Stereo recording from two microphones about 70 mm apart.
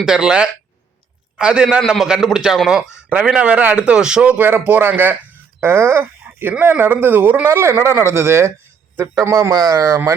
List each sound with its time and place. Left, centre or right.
0.0 s a man's voice: centre; by 7.5 s right
7.5 s speech: right
9.6 s speech: right